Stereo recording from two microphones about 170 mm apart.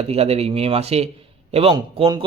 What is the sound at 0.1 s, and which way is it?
A man's voice, 35° right (ahead or behind).